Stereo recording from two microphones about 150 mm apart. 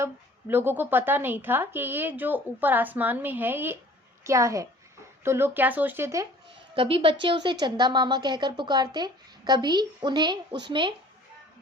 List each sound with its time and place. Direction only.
0.0 s a woman's voice: 15° right (ahead or behind)
6.7 s a woman's voice: 35° right (ahead or behind)